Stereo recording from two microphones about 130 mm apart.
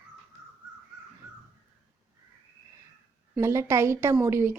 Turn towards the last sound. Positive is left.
turn(degrees=-20)  # may be behind; listen again after turning